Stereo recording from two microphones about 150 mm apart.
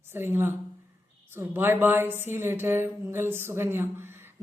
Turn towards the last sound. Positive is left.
turn(degrees=-15)  # may be behind; listen again after turning